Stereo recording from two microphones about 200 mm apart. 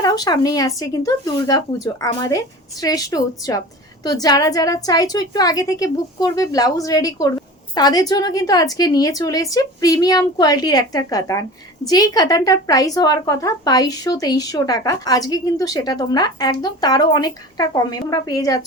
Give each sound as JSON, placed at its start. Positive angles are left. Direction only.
{"t": 0.0, "sound": "a woman's voice", "side_deg": 20}